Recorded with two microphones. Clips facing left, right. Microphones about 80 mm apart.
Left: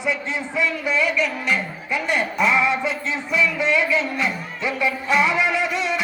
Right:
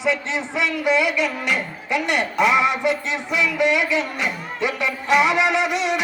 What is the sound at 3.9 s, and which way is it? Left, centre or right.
Music, right.